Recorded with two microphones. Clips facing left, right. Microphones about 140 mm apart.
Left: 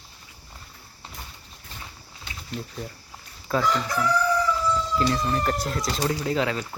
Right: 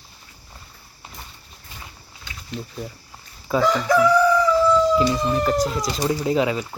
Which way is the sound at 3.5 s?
15° right (ahead or behind).